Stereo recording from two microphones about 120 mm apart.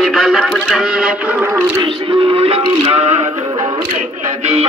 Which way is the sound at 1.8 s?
45° right (ahead or behind).